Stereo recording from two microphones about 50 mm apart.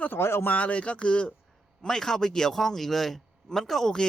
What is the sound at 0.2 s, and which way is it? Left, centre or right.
Speech, left.